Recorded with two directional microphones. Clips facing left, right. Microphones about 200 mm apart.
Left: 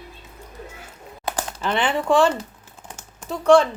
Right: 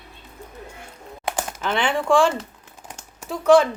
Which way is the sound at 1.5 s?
5° right (ahead or behind).